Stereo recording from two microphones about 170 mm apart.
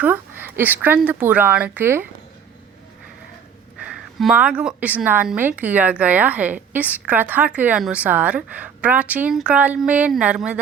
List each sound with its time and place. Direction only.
0.0 s a woman's voice: 10° right (ahead or behind)
3.8 s a woman's voice: 5° right (ahead or behind)